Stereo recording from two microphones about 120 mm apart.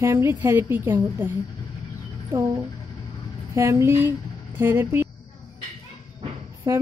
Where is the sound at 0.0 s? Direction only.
20° right (ahead or behind).